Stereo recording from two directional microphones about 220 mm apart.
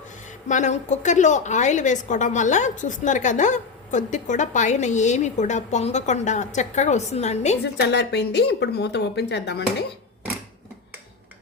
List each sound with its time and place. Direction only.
0.4 s a woman's voice: 35° left (ahead or behind)
7.6 s a woman's voice: 50° left (ahead or behind)